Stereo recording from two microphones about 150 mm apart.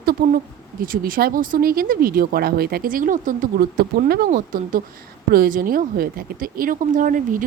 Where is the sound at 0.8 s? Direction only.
70° right (ahead or behind).